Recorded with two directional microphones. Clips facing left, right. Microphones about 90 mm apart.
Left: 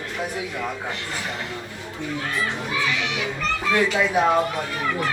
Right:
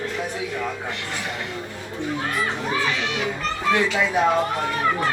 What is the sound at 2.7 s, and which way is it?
Children playing, 40° right (ahead or behind).